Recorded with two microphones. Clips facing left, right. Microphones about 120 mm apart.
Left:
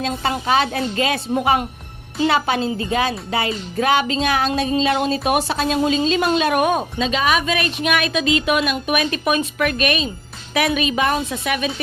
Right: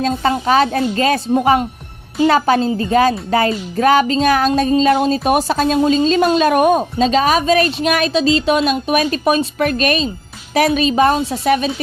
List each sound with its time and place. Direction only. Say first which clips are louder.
0.2 s a woman's voice: right 4 dB; 40° right (ahead or behind)
2.2 s a woman's voice: right 5 dB; 40° right (ahead or behind)